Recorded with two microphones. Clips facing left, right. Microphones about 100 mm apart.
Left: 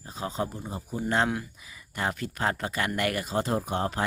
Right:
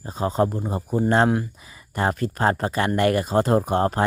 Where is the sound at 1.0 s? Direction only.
40° right (ahead or behind).